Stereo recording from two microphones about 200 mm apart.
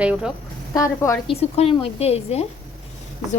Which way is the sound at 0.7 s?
15° left (ahead or behind).